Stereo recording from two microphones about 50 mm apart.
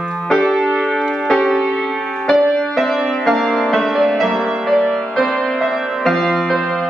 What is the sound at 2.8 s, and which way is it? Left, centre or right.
Music, centre.